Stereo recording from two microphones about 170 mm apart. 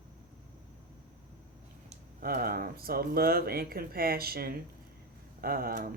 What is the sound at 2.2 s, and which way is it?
Speech, 60° right (ahead or behind).